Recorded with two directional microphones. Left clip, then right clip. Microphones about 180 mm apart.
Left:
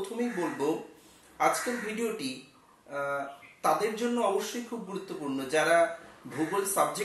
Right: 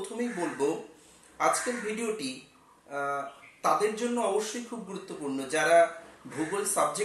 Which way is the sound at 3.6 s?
Centre (ahead or behind).